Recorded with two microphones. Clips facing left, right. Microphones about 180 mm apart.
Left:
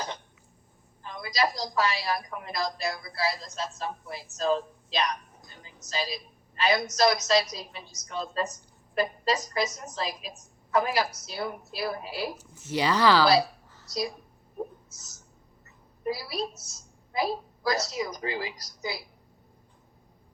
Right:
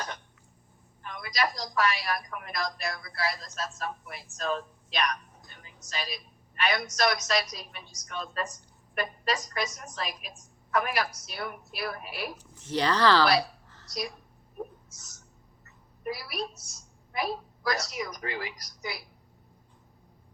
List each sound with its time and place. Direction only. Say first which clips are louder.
1.0 s a sound: left 3 dB; 30° left (ahead or behind)
1.6 s a woman's voice: left 1 dB; 25° left (ahead or behind)
12.3 s speech: even; 5° left (ahead or behind)
16.0 s a woman's voice: left 3 dB; 30° left (ahead or behind)